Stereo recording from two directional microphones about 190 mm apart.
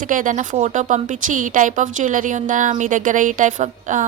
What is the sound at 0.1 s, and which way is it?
A woman's voice, 45° right (ahead or behind).